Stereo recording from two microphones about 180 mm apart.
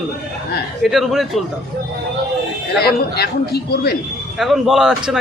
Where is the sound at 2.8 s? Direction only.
60° left (ahead or behind).